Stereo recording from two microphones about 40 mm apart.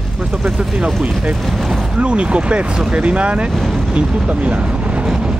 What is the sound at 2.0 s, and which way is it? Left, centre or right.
Speech, right.